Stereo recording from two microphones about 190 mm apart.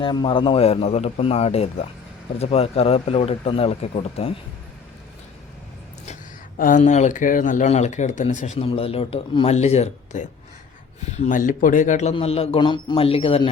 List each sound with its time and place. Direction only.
0.0 s speech: 25° left (ahead or behind)
6.6 s a man's voice: 45° left (ahead or behind)